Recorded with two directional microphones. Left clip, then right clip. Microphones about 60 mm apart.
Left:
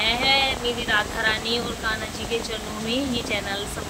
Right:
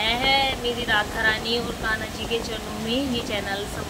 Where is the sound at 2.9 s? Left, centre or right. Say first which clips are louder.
Even; left.